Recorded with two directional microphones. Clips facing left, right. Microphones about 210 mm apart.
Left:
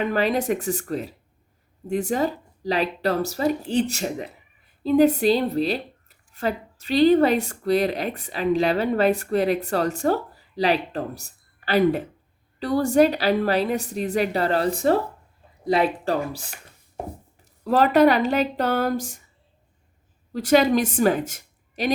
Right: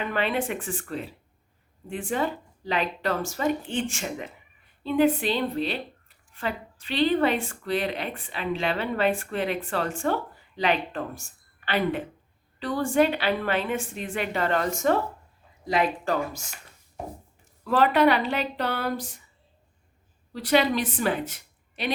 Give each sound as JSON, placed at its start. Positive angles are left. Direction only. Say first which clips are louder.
{"t": 0.1, "sound": "a woman's voice", "louder": "left 5 dB", "side_deg": 40}
{"t": 20.3, "sound": "a woman's voice", "louder": "left 5 dB", "side_deg": 45}